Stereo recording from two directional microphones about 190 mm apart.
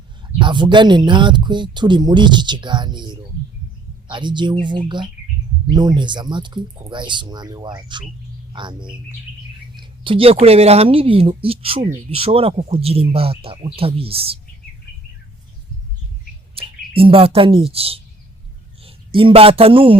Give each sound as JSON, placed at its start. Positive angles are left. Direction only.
{"t": 0.3, "sound": "speech", "side_deg": -25}
{"t": 16.6, "sound": "speech", "side_deg": -30}